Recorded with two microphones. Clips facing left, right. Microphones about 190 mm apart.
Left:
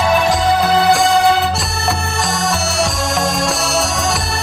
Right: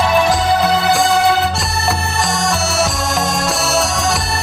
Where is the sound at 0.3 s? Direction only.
Centre (ahead or behind).